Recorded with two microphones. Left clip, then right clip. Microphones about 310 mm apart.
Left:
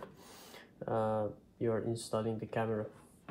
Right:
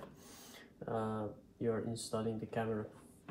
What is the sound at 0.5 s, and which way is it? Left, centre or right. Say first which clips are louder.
Speech: left 4 dB; left.